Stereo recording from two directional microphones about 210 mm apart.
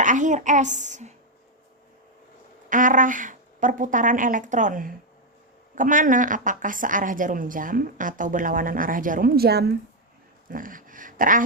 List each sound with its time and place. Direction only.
0.0 s speech: 35° right (ahead or behind)
2.6 s speech: 40° right (ahead or behind)